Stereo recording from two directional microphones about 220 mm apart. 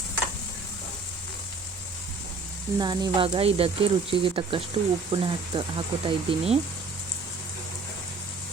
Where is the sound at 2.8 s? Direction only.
20° right (ahead or behind).